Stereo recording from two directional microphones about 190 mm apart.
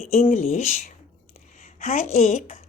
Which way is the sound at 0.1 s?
40° left (ahead or behind).